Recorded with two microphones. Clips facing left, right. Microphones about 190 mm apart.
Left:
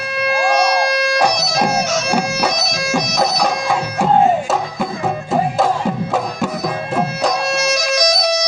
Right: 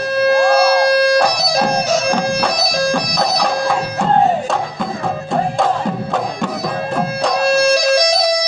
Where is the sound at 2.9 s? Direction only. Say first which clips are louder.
Left 1 dB; 5° left (ahead or behind).